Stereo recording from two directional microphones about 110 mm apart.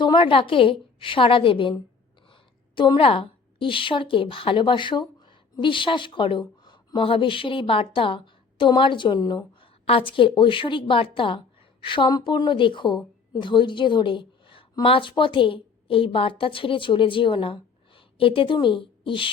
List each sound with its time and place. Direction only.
0.0 s a woman's voice: 50° left (ahead or behind)
9.6 s a woman's voice: 55° left (ahead or behind)